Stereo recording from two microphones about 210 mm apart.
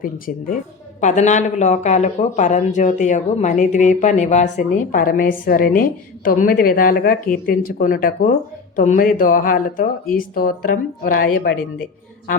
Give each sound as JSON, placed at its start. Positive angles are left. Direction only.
{"t": 0.0, "sound": "speech", "side_deg": 40}